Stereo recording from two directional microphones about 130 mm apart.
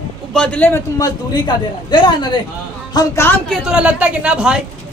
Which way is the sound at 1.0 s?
35° left (ahead or behind).